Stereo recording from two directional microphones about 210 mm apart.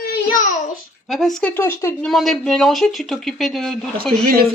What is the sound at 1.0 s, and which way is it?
Speech, centre (ahead or behind).